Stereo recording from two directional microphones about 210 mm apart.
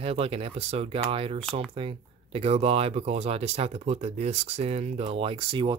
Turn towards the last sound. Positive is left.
turn(degrees=-25)  # may be behind; listen again after turning